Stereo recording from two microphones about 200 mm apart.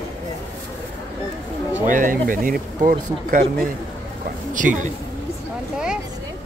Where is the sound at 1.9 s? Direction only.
40° right (ahead or behind).